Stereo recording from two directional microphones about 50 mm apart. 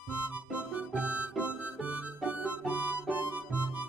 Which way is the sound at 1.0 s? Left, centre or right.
Right.